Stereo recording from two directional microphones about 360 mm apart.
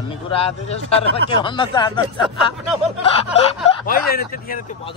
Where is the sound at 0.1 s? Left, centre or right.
Centre.